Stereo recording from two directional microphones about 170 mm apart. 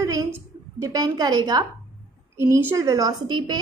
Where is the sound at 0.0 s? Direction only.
20° right (ahead or behind).